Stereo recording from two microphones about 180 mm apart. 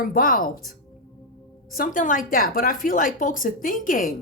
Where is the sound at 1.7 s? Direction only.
45° left (ahead or behind).